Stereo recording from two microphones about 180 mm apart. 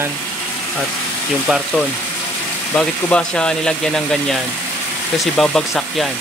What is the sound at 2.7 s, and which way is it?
Speech, 5° left (ahead or behind).